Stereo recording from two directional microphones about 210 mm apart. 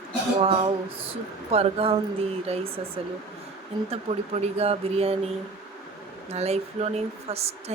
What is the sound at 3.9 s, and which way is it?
Speech, 30° right (ahead or behind).